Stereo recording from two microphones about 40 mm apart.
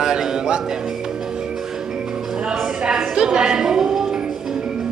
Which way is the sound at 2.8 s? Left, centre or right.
Centre.